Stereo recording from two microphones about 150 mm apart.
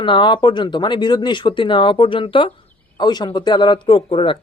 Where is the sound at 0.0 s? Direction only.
35° left (ahead or behind).